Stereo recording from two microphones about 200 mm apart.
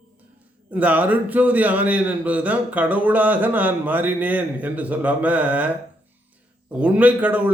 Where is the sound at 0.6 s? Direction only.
10° right (ahead or behind).